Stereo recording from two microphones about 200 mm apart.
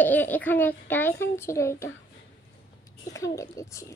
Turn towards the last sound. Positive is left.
turn(degrees=15)  # may be behind; listen again after turning